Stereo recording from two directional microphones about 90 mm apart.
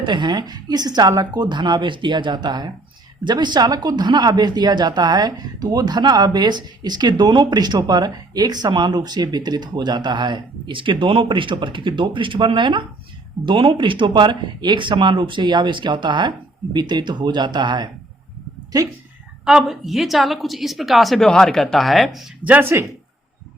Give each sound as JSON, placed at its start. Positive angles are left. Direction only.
{"t": 0.0, "sound": "speech", "side_deg": -55}
{"t": 18.7, "sound": "speech", "side_deg": -45}
{"t": 19.5, "sound": "a woman's voice", "side_deg": -5}
{"t": 22.7, "sound": "speech", "side_deg": -25}